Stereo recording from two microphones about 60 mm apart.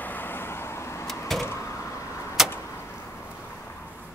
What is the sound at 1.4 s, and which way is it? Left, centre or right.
Door, left.